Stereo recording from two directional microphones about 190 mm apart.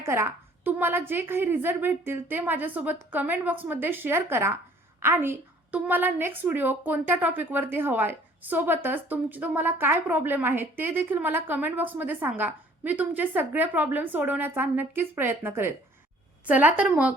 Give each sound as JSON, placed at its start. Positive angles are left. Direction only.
{"t": 0.0, "sound": "a woman's voice", "side_deg": -15}